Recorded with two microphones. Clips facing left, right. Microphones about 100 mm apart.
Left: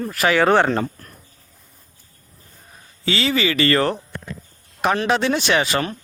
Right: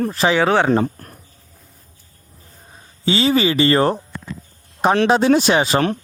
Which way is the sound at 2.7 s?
30° right (ahead or behind).